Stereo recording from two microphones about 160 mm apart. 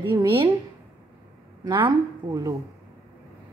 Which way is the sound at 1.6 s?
30° right (ahead or behind).